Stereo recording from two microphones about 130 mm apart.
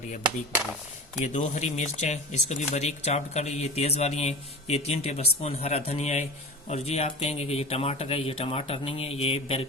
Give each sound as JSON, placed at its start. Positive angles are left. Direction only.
{"t": 1.2, "sound": "speech", "side_deg": 70}